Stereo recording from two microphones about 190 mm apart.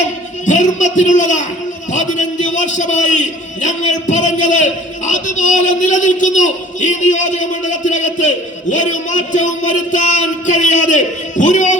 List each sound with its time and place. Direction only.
0.4 s a man's voice: 40° left (ahead or behind)